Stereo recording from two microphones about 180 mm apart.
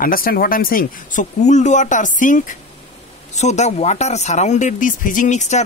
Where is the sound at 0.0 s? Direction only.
55° left (ahead or behind).